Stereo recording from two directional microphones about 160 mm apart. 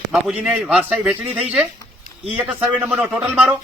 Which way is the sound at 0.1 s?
5° right (ahead or behind).